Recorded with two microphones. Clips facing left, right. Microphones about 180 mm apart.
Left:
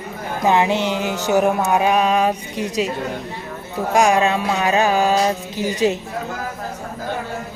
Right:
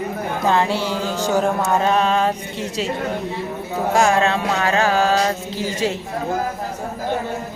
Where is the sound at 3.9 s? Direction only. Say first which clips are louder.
Left 1 dB; 15° left (ahead or behind).